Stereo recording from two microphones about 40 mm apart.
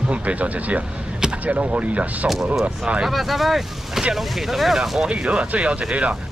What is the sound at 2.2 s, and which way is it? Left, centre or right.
Speech, centre.